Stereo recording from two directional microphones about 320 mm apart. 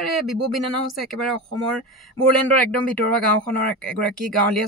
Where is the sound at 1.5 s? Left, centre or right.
Right.